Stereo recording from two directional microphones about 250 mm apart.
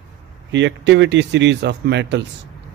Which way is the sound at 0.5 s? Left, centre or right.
Right.